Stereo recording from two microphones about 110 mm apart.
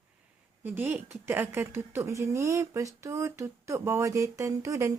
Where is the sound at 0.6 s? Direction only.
20° right (ahead or behind).